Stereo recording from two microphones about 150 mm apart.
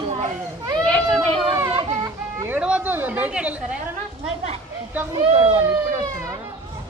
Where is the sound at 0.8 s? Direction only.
5° left (ahead or behind).